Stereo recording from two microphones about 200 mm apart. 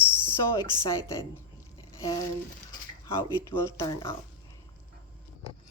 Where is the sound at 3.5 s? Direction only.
15° left (ahead or behind).